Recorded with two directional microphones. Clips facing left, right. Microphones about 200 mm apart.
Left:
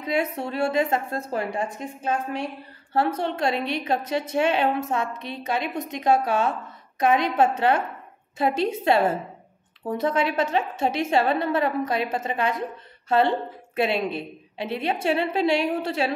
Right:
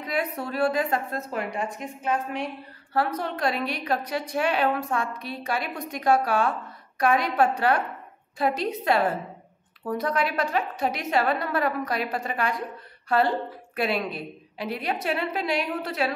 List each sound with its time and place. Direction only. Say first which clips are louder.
0.0 s a woman's voice: left 3 dB; 25° left (ahead or behind)